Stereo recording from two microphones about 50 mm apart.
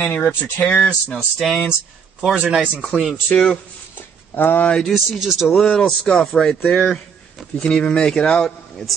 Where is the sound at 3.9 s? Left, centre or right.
Left.